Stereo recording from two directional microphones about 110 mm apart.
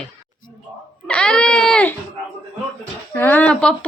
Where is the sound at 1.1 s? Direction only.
10° left (ahead or behind).